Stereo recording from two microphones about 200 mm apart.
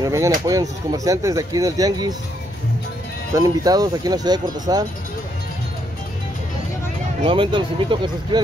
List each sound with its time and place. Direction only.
0.0 s speech: 15° right (ahead or behind)
3.3 s speech: 20° right (ahead or behind)
7.2 s speech: 25° right (ahead or behind)